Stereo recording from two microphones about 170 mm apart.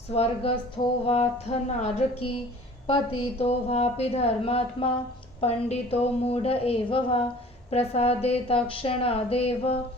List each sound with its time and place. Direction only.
0.1 s a woman's voice: 35° left (ahead or behind)